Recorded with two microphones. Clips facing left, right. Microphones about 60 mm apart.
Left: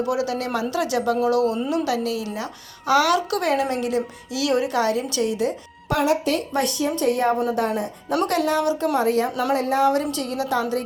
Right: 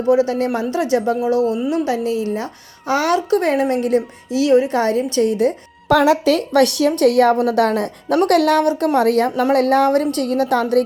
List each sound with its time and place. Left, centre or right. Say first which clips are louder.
0.1 s a woman's voice: right 8 dB; right
6.5 s a woman's voice: right 8 dB; right
8.3 s a woman's voice: right 9 dB; right
8.6 s a woman's voice: right 5 dB; right